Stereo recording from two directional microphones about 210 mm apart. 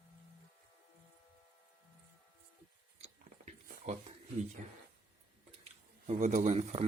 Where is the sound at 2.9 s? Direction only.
30° right (ahead or behind).